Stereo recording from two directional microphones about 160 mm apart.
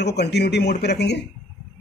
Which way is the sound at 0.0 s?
90° left.